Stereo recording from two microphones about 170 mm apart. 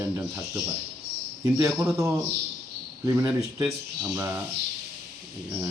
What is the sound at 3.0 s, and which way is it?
Speech, 15° right (ahead or behind).